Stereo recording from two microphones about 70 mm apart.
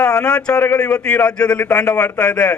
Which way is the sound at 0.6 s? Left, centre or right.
Left.